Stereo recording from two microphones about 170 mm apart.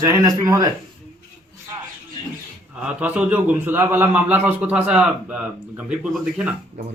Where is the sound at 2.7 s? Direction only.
5° right (ahead or behind).